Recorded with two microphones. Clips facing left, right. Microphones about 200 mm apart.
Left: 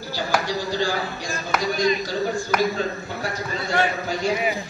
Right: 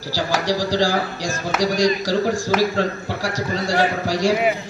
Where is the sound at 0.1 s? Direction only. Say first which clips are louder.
Right 3 dB; 90° right.